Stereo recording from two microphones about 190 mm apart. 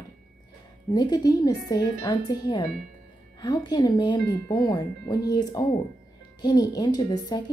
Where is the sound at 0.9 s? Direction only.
20° left (ahead or behind).